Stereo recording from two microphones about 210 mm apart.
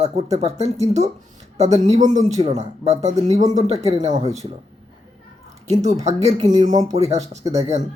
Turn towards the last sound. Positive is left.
turn(degrees=-30)  # may be behind; listen again after turning